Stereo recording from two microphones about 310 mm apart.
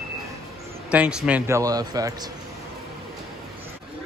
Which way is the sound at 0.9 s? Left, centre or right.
Centre.